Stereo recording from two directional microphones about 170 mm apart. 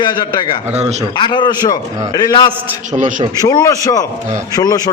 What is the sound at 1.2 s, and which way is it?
A man's voice, 25° left (ahead or behind).